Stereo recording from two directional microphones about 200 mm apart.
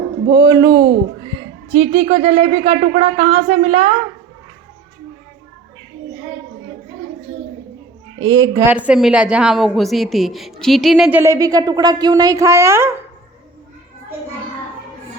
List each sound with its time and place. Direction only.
0.3 s speech: 20° right (ahead or behind)
8.2 s a woman's voice: 20° right (ahead or behind)
8.7 s a woman's voice: 5° right (ahead or behind)